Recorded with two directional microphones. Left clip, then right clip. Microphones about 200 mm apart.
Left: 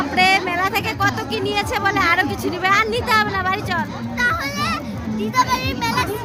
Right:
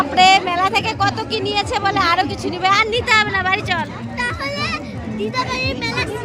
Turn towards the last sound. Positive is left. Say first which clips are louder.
# left 1 dB
turn(degrees=15)  # may be behind; listen again after turning